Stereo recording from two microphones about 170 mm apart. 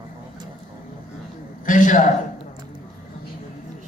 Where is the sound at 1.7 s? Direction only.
50° left (ahead or behind).